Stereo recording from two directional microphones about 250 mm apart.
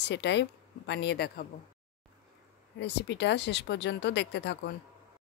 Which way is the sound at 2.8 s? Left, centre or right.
Left.